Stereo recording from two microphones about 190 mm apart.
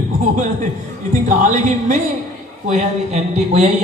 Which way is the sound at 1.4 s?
40° right (ahead or behind).